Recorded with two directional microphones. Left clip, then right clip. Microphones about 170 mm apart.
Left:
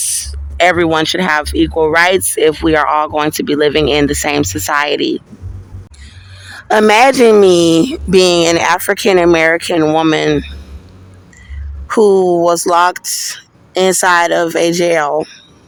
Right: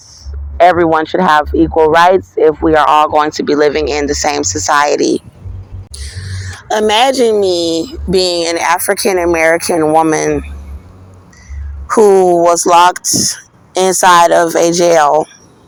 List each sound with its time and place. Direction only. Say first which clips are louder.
0.0 s mechanisms: left 16 dB; 40° left (ahead or behind)
1.8 s speech: right 3 dB; 45° left (ahead or behind)
6.0 s a sound: right 11 dB; 20° right (ahead or behind)
6.6 s speech: left 2 dB; 15° left (ahead or behind)
7.3 s speech: left 4 dB; 60° left (ahead or behind)
8.6 s speech: even; 30° left (ahead or behind)
9.6 s speech: right 2 dB; 20° left (ahead or behind)
12.2 s speech: right 3 dB; 35° left (ahead or behind)
14.7 s speech: right 4 dB; 15° left (ahead or behind)